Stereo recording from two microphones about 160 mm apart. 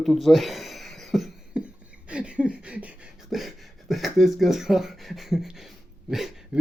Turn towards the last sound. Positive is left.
turn(degrees=0)  # may be behind; listen again after turning